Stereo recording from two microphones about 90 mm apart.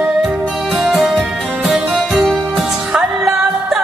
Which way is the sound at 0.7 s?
5° right (ahead or behind).